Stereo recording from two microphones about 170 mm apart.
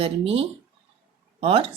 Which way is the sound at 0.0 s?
35° right (ahead or behind).